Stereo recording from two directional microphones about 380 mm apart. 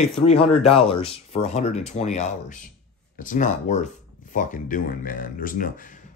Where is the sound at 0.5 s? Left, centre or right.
Centre.